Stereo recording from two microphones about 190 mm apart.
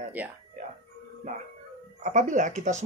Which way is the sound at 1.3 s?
40° right (ahead or behind).